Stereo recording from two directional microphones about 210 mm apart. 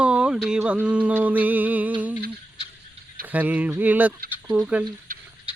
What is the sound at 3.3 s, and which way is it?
Speech, 5° right (ahead or behind).